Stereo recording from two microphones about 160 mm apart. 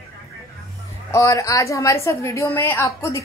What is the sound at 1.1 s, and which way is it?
A woman's voice, 20° left (ahead or behind).